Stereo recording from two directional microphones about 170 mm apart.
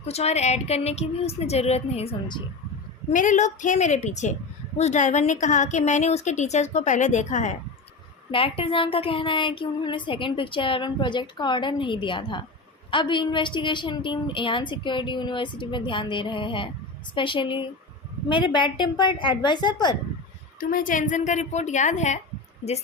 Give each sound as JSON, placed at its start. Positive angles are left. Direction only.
{"t": 0.0, "sound": "speech", "side_deg": 40}
{"t": 3.1, "sound": "a woman's voice", "side_deg": 45}
{"t": 8.3, "sound": "speech", "side_deg": 30}
{"t": 20.6, "sound": "a woman's voice", "side_deg": 55}